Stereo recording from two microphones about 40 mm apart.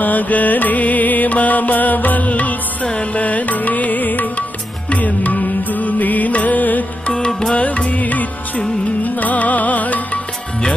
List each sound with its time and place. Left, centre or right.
0.0 s music: left
7.2 s music: centre
7.5 s music: left